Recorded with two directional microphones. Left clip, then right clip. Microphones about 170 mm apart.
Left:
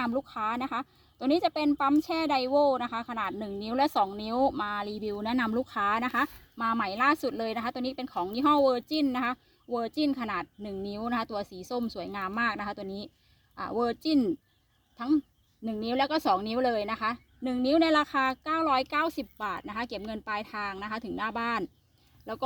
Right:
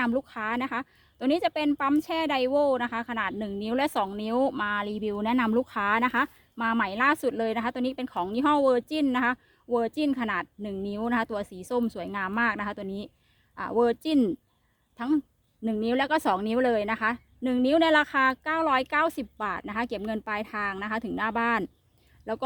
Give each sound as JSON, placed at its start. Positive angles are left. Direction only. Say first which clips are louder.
{"t": 0.0, "sound": "a woman's voice", "louder": "right 2 dB", "side_deg": -20}